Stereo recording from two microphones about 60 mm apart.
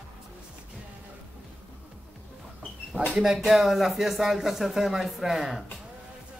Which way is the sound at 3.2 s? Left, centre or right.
Centre.